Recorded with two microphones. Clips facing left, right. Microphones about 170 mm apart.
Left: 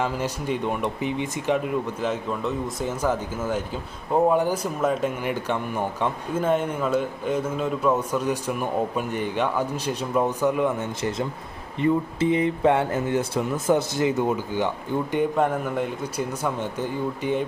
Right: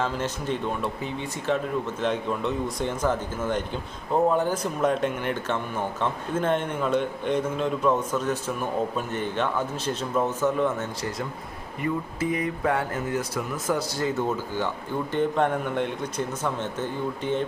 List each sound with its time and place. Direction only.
0.0 s speech: 10° left (ahead or behind)
2.0 s speech: 5° left (ahead or behind)